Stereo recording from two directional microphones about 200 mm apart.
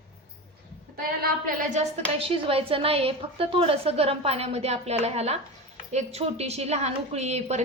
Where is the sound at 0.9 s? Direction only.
50° right (ahead or behind).